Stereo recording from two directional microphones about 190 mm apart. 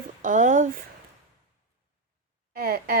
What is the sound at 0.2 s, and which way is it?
Speech, 40° right (ahead or behind).